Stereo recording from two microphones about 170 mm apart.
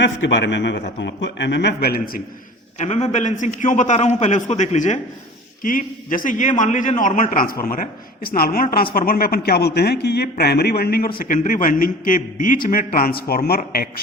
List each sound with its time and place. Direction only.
0.0 s a man's voice: 90° left; by 2.2 s 65° left (ahead or behind)
2.7 s a man's voice: 45° left (ahead or behind); by 11.1 s 65° left (ahead or behind)
11.2 s a man's voice: 50° left (ahead or behind)